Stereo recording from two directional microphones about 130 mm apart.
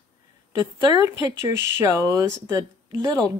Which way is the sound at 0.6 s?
25° right (ahead or behind).